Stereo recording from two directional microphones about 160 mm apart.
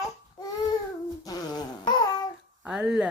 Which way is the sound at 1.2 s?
25° left (ahead or behind).